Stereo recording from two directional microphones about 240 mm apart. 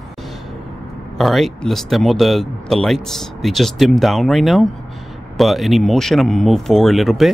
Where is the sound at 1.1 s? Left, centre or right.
Centre.